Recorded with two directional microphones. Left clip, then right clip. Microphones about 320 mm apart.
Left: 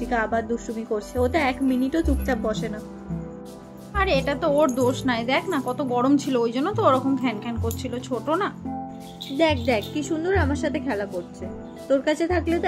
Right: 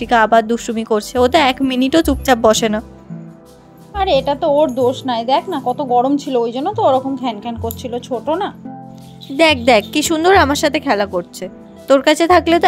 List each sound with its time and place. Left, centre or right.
0.0 s speech: right
3.9 s a woman's voice: centre
9.4 s speech: right